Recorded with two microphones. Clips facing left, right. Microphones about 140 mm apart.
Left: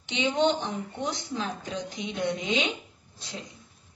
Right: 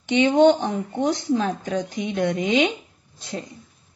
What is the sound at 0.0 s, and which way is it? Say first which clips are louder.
Speech: right 9 dB; 55° right (ahead or behind).